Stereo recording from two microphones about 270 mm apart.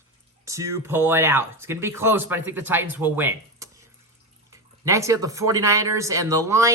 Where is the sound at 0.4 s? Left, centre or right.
Centre.